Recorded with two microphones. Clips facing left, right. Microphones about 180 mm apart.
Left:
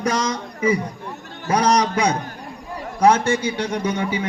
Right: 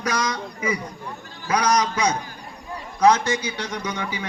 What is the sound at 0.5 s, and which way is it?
A man's voice, 30° left (ahead or behind).